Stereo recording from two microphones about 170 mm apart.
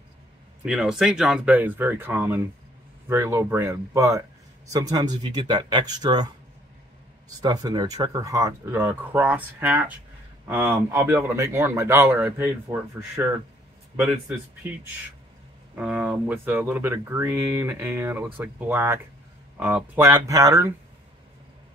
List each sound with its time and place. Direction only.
0.7 s speech: 5° right (ahead or behind)
15.7 s speech: 10° right (ahead or behind)